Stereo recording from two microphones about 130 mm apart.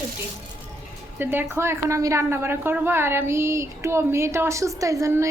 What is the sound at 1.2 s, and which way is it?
A woman's voice, 15° right (ahead or behind).